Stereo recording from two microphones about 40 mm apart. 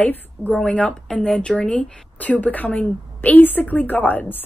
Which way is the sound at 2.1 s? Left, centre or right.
Left.